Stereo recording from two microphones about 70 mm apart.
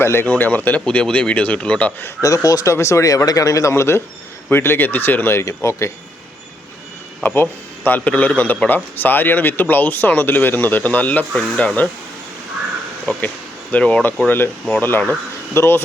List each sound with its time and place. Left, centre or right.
0.0 s speech: left
0.3 s speech: left
2.2 s speech: left
2.7 s speech: left
7.2 s speech: left
13.2 s speech: left
14.3 s speech: left